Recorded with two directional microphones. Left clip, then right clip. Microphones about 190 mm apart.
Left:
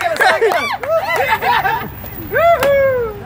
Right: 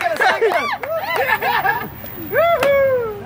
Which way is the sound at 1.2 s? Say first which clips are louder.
Left 3 dB; 5° left (ahead or behind).